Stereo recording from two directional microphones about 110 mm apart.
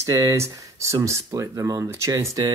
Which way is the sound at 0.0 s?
25° right (ahead or behind).